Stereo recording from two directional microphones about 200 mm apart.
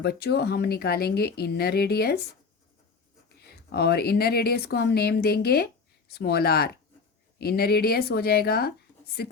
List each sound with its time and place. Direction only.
0.0 s speech: 55° left (ahead or behind)
3.4 s speech: 55° left (ahead or behind)